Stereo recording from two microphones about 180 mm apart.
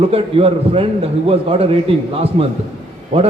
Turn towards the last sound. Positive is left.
turn(degrees=-30)  # may be behind; listen again after turning